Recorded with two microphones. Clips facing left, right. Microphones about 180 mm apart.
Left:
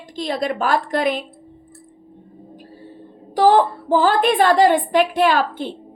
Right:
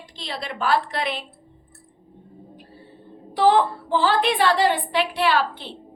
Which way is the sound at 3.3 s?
45° left (ahead or behind).